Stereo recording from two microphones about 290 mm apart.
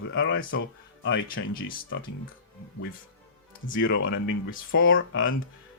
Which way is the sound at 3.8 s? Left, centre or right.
Left.